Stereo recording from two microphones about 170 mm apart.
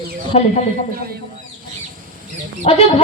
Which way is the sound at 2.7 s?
40° left (ahead or behind).